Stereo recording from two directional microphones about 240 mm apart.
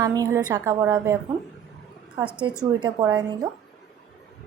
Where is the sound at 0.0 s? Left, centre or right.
Centre.